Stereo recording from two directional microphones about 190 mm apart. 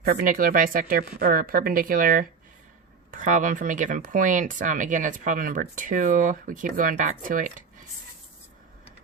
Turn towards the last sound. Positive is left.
turn(degrees=-45)  # may be behind; listen again after turning